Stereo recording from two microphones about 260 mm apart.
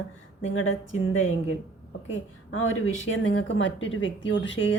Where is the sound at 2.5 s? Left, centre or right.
Left.